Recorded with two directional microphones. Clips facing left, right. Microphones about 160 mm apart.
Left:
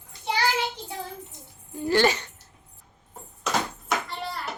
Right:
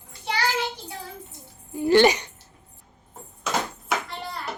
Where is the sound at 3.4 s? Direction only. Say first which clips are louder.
Even; centre (ahead or behind).